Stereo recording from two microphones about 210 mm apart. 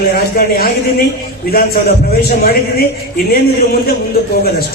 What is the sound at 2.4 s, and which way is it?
Speech, 45° left (ahead or behind).